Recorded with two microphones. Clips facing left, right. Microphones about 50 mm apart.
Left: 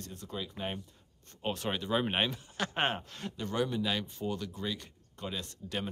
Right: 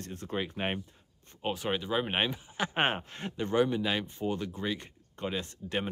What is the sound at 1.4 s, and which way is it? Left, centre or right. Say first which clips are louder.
Speech: right 2 dB; centre.